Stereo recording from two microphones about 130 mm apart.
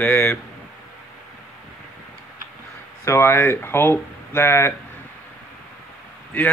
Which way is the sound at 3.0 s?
20° left (ahead or behind).